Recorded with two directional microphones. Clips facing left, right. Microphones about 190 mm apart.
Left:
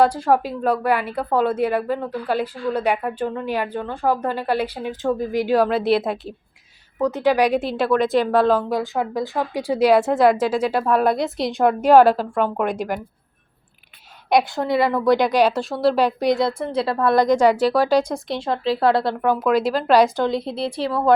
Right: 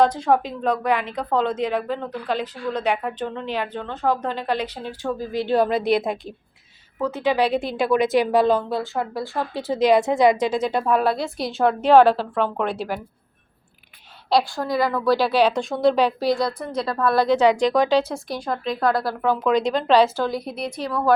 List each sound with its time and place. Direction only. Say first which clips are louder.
0.0 s a woman's voice: left 1 dB; 10° left (ahead or behind)
7.0 s a woman's voice: left 3 dB; 15° left (ahead or behind)
8.7 s a woman's voice: left 3 dB; 15° left (ahead or behind)
11.0 s a woman's voice: left 3 dB; 20° left (ahead or behind)
14.3 s a woman's voice: left 2 dB; 20° left (ahead or behind)
18.3 s a woman's voice: left 4 dB; 25° left (ahead or behind)
19.2 s a woman's voice: right 1 dB; 10° left (ahead or behind); by 21.1 s 30° left (ahead or behind)